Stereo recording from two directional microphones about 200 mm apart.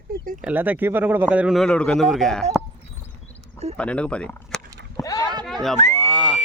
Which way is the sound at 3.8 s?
5° left (ahead or behind).